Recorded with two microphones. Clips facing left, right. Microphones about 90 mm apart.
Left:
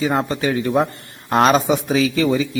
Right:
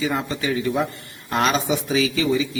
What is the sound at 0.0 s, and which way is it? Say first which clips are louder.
A man's voice: left 5 dB; 45° left (ahead or behind).